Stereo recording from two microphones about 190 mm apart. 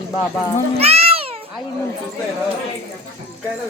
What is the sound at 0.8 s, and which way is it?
Cat, 30° right (ahead or behind).